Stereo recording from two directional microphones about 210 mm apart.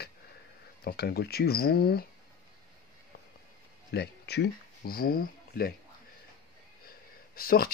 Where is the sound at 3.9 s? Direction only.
50° left (ahead or behind).